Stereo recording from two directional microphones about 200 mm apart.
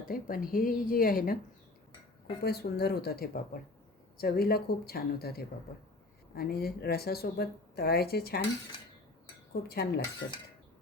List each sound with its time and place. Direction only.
0.1 s speech: 45° left (ahead or behind)
2.4 s speech: 50° left (ahead or behind)
9.5 s speech: 55° left (ahead or behind)